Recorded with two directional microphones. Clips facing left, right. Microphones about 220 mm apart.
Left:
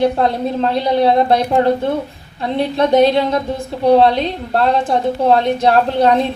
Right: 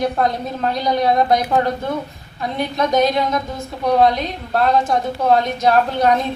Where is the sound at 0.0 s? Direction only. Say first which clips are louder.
Left 4 dB; 30° left (ahead or behind).